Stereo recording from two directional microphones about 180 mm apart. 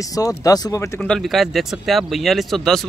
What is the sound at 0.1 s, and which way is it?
Speech, 20° left (ahead or behind).